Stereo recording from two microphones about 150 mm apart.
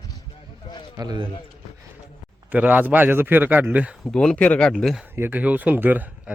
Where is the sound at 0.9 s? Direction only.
25° right (ahead or behind).